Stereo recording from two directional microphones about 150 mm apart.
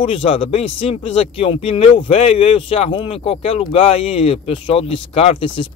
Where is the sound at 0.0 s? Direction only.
40° left (ahead or behind).